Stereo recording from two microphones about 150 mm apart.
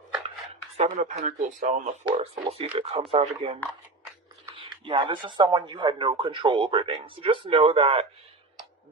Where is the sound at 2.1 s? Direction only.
45° right (ahead or behind).